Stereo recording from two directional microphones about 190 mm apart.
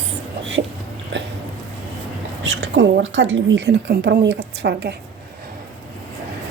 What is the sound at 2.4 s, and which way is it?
A woman's voice, 75° right (ahead or behind).